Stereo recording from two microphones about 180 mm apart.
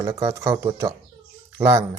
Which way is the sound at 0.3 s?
15° right (ahead or behind).